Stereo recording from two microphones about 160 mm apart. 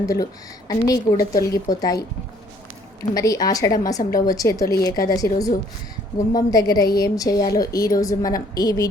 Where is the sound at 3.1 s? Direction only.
20° left (ahead or behind).